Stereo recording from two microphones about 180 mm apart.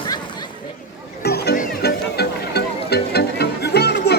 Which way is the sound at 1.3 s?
60° left (ahead or behind).